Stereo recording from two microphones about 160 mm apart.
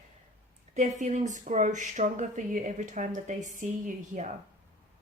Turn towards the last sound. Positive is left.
turn(degrees=-50)  # may be behind; listen again after turning